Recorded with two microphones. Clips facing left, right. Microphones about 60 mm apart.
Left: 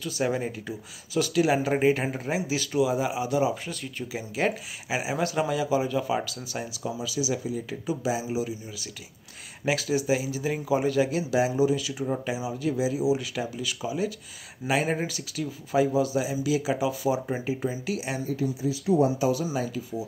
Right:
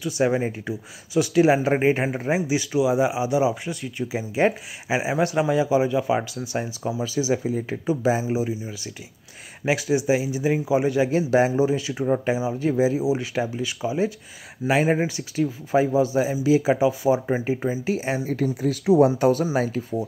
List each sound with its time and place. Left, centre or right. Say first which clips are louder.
0.0 s a man's voice: right 5 dB; right
18.3 s speech: right 2 dB; right